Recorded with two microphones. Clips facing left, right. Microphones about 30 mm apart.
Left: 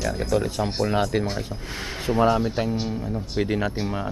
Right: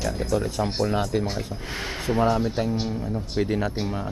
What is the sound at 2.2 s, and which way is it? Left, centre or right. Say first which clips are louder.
Speech: left 2 dB; centre.